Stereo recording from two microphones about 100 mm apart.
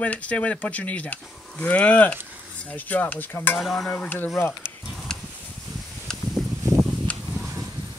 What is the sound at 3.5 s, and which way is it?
Stir, centre (ahead or behind).